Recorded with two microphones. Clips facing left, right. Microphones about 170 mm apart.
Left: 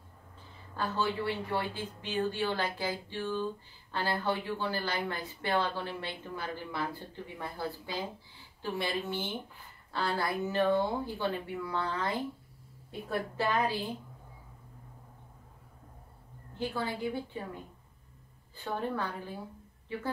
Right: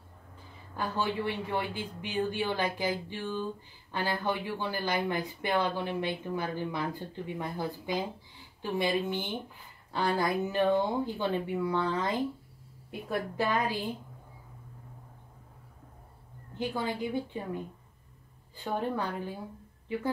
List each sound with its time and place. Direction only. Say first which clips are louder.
0.7 s speech: right 1 dB; 15° right (ahead or behind)
16.5 s speech: right 2 dB; 15° right (ahead or behind)
18.6 s speech: right 2 dB; 15° right (ahead or behind)